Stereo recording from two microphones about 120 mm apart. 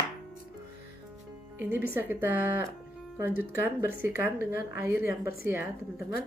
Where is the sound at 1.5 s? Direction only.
15° right (ahead or behind).